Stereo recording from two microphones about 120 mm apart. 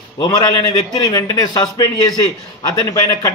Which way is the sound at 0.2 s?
30° left (ahead or behind).